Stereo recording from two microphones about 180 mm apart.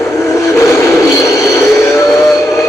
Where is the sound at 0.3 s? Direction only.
15° left (ahead or behind).